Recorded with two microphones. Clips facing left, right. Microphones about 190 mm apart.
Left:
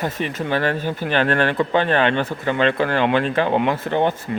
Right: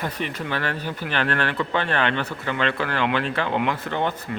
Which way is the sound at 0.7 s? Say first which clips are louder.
Left 6 dB; 45° left (ahead or behind).